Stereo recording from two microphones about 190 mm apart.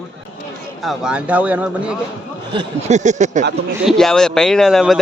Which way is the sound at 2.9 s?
40° right (ahead or behind).